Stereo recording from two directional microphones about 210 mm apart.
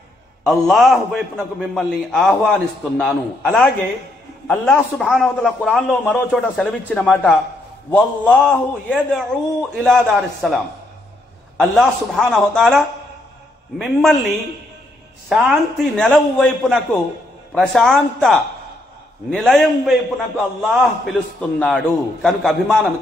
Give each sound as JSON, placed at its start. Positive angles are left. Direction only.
{"t": 0.5, "sound": "a man's voice", "side_deg": 0}
{"t": 15.2, "sound": "a man's voice", "side_deg": 0}